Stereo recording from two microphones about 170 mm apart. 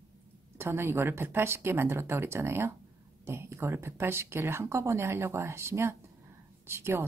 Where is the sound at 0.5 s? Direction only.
15° right (ahead or behind).